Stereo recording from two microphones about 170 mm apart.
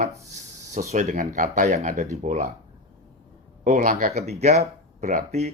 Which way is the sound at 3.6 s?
45° right (ahead or behind).